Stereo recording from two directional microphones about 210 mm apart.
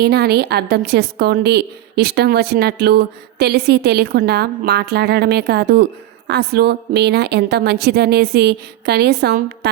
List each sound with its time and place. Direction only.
0.0 s a woman's voice: 50° right (ahead or behind)